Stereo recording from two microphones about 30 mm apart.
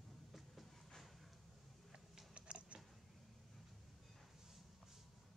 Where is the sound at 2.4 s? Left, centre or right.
Right.